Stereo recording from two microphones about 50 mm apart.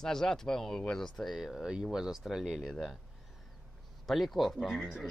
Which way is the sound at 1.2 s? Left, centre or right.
Centre.